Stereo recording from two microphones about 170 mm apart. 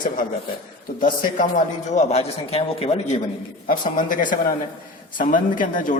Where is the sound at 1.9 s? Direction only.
40° left (ahead or behind).